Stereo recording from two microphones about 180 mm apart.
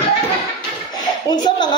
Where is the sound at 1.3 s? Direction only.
25° left (ahead or behind).